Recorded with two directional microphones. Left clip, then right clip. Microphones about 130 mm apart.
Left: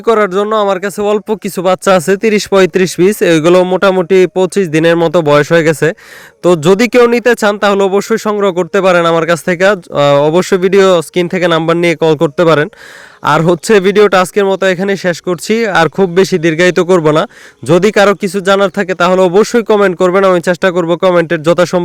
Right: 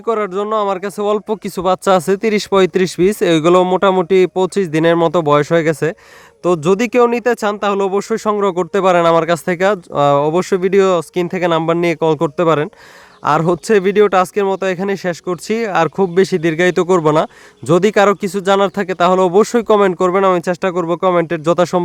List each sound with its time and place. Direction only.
0.0 s speech: 40° left (ahead or behind)
0.8 s speech: 20° left (ahead or behind)